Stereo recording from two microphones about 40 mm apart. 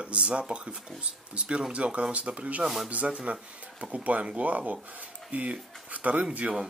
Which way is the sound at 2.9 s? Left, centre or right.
Right.